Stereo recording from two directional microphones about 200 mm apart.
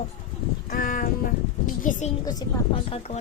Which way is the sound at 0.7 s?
45° left (ahead or behind).